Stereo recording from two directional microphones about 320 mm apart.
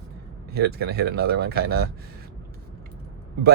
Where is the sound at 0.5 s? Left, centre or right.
Right.